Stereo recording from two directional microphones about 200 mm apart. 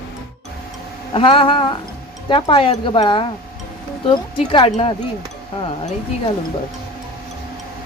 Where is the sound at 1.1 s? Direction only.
25° left (ahead or behind).